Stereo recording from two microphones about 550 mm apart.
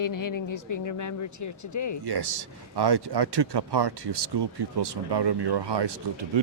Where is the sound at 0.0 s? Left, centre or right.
Left.